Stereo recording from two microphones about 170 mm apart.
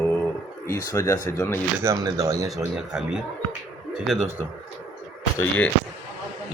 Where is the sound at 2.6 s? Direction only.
5° right (ahead or behind).